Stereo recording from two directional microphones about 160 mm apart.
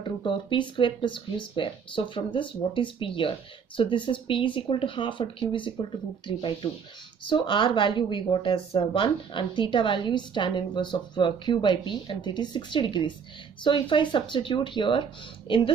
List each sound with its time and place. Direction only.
0.2 s speech: 30° left (ahead or behind)